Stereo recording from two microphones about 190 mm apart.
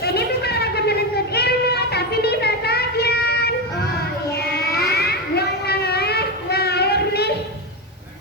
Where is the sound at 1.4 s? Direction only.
55° left (ahead or behind).